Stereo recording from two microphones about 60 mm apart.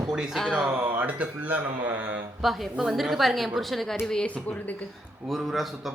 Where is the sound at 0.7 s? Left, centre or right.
Right.